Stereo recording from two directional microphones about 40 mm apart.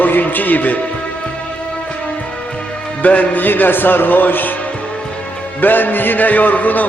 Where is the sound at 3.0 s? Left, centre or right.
Left.